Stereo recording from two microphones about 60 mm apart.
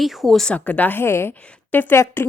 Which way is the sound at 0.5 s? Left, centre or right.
Left.